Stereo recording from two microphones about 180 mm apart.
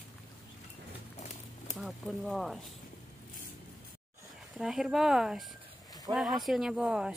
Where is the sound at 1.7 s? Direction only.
Centre (ahead or behind).